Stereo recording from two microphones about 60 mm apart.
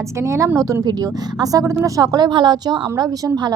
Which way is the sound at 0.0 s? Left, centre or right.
Right.